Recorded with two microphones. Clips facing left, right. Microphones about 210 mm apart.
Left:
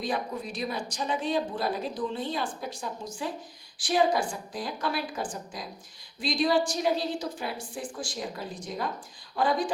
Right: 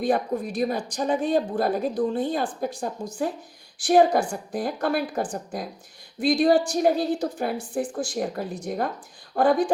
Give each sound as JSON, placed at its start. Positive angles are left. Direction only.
{"t": 0.0, "sound": "a woman's voice", "side_deg": -50}